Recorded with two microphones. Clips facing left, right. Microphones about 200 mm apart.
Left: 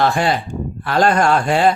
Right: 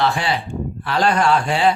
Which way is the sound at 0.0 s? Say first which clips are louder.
Left 3 dB; 45° left (ahead or behind).